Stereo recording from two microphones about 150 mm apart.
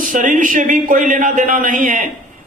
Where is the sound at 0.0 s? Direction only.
65° right (ahead or behind).